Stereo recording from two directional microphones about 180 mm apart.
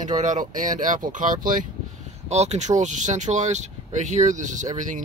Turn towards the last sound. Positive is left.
turn(degrees=-45)  # may be behind; listen again after turning